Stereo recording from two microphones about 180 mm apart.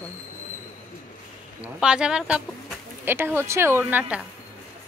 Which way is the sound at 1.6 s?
5° right (ahead or behind).